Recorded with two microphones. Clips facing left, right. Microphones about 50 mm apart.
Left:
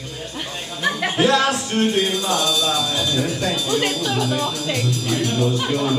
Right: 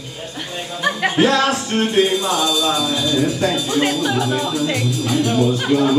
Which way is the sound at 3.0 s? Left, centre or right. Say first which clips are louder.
Right 4 dB; centre.